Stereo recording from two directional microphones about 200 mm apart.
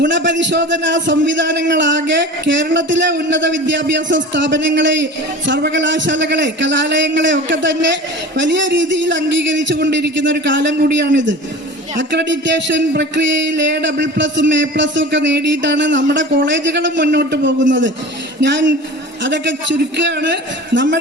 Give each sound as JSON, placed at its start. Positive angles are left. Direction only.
{"t": 0.0, "sound": "speech", "side_deg": -65}